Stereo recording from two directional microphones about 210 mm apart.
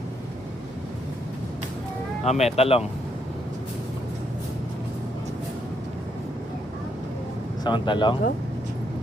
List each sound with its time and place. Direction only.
2.2 s speech: 30° left (ahead or behind)
7.6 s speech: 20° left (ahead or behind)